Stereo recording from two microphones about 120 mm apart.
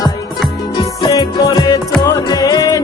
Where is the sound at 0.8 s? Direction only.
35° left (ahead or behind).